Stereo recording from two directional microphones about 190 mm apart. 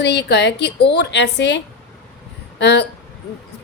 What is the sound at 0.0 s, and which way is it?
A woman's voice, 60° left (ahead or behind).